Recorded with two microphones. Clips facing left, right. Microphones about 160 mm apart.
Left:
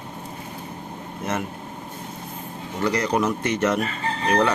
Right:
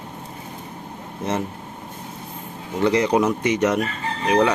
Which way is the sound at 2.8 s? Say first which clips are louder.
Right 4 dB; 20° right (ahead or behind).